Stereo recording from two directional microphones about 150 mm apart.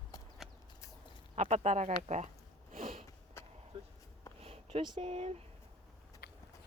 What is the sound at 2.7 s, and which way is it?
Sniff, 70° right (ahead or behind).